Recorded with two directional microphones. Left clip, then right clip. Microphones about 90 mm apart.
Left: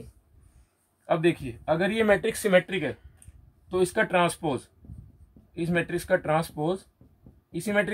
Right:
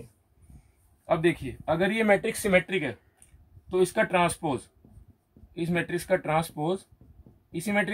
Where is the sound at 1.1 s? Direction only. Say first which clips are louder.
Left 1 dB; 40° left (ahead or behind); by 2.6 s 65° left (ahead or behind).